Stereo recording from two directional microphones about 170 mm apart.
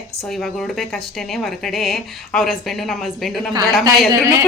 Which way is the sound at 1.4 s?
Centre (ahead or behind).